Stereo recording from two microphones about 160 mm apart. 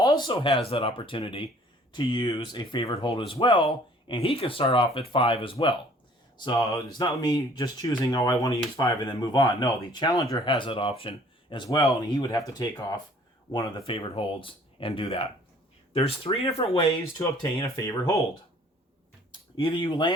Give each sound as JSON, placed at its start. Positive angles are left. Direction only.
{"t": 0.0, "sound": "speech", "side_deg": 25}
{"t": 17.7, "sound": "speech", "side_deg": 20}
{"t": 19.5, "sound": "speech", "side_deg": 30}